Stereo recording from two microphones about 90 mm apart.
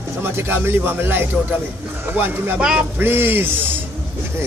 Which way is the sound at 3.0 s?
25° right (ahead or behind).